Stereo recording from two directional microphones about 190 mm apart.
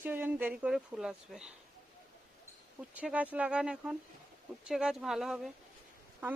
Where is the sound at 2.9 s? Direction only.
5° right (ahead or behind).